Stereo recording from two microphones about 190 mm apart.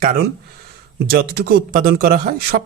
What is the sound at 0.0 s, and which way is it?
A man's voice, 50° right (ahead or behind).